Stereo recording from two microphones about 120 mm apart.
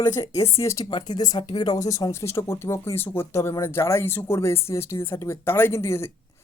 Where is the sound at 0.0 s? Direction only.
25° left (ahead or behind).